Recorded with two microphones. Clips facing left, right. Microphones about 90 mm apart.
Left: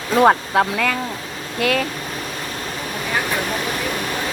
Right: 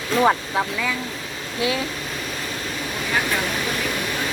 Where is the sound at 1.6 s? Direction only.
55° left (ahead or behind).